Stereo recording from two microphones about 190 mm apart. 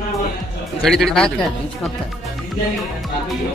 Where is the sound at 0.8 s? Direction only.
Centre (ahead or behind).